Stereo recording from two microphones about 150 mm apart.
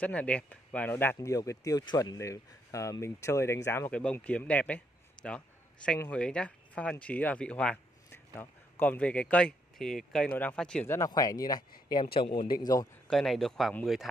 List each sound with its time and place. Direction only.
0.0 s speech: 10° left (ahead or behind)
10.9 s speech: 20° left (ahead or behind)
12.5 s speech: 25° left (ahead or behind)
13.1 s speech: 5° left (ahead or behind)